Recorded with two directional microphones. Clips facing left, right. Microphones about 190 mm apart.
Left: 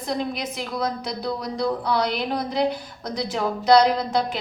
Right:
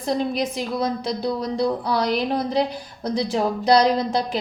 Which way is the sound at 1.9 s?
30° right (ahead or behind).